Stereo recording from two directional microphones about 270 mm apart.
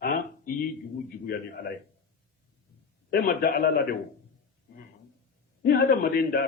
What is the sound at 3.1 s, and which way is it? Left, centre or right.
Speech, left.